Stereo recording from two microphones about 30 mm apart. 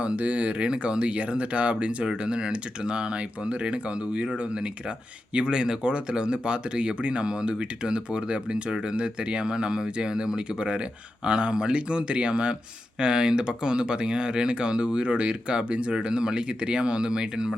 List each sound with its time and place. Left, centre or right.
0.2 s speech: right
0.6 s speech: right
5.5 s speech: right
13.0 s speech: right